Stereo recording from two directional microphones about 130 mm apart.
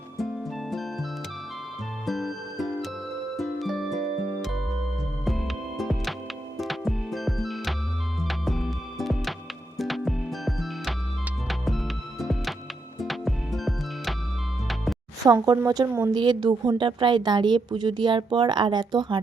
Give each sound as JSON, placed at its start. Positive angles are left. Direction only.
{"t": 0.7, "sound": "music", "side_deg": 0}
{"t": 2.0, "sound": "music", "side_deg": 0}
{"t": 15.2, "sound": "a woman's voice", "side_deg": -25}